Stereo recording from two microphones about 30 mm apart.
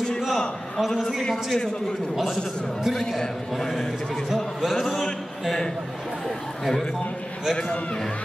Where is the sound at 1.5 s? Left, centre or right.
Centre.